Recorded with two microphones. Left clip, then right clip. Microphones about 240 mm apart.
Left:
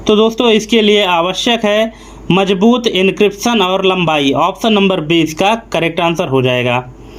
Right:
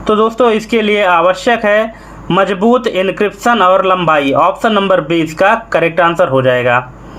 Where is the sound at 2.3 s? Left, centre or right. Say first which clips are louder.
Right 1 dB; left.